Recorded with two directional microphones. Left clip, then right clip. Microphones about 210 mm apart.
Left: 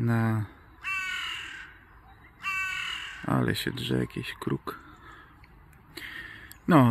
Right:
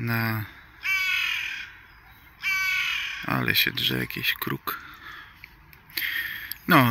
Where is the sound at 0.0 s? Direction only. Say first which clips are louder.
Right 2 dB; 20° left (ahead or behind).